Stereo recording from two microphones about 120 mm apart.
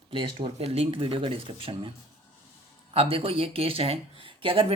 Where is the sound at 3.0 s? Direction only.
50° right (ahead or behind).